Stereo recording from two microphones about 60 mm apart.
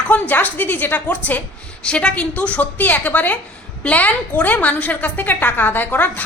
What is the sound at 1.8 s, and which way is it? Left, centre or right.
A woman's voice, centre.